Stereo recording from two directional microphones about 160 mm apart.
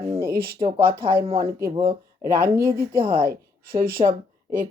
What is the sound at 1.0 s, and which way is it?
Speech, 35° right (ahead or behind).